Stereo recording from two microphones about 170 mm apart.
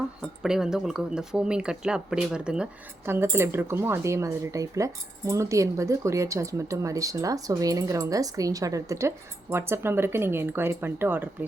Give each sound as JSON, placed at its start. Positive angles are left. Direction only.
{"t": 0.4, "sound": "speech", "side_deg": -5}